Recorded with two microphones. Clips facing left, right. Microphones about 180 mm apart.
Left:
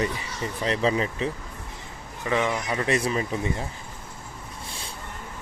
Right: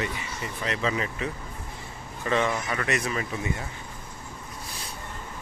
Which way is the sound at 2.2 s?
15° left (ahead or behind).